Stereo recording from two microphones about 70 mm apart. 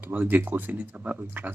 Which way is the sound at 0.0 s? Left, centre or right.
Right.